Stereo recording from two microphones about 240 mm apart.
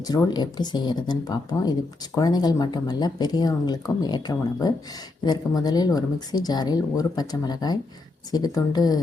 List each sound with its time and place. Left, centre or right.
0.1 s speech: centre